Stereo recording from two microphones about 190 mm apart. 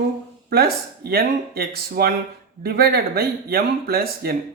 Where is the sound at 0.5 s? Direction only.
55° right (ahead or behind).